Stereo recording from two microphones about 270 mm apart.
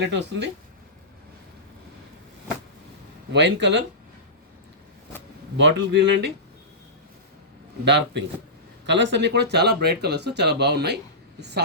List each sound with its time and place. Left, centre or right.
0.0 s speech: right
3.3 s speech: right
5.5 s speech: right
7.9 s a woman's voice: right